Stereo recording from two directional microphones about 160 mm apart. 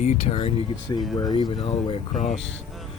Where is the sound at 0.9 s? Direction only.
25° left (ahead or behind).